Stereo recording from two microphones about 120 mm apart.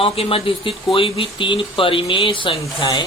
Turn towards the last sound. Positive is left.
turn(degrees=45)  # may be behind; listen again after turning